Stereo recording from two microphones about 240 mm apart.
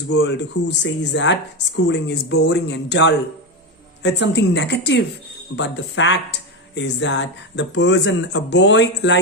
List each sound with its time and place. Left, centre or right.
0.1 s speech: left